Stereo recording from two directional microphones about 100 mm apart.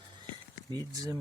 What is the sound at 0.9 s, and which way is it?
Speech, 35° right (ahead or behind).